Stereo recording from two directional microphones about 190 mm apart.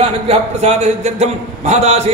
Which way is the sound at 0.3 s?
35° right (ahead or behind).